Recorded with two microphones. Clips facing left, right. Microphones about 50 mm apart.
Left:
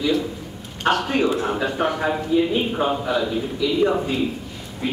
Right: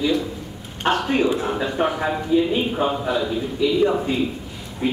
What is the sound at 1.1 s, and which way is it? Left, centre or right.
Speech, centre.